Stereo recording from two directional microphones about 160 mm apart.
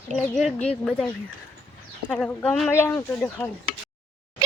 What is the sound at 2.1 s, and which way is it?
Speech, 5° left (ahead or behind).